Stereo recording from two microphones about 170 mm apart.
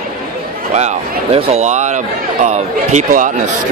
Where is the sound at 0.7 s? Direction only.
40° right (ahead or behind).